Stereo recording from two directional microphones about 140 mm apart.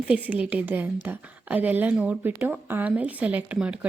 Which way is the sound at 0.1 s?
10° right (ahead or behind).